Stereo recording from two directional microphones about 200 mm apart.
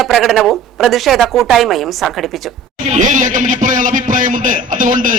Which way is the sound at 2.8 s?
40° right (ahead or behind).